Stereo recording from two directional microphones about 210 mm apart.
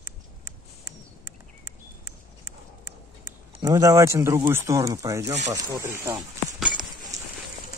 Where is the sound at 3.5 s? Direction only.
15° right (ahead or behind).